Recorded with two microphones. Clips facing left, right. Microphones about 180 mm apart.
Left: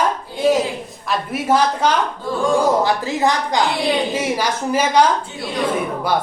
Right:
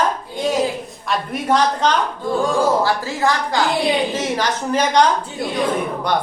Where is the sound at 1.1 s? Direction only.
5° left (ahead or behind).